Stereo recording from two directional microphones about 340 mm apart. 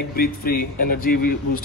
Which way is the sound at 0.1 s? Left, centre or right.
Left.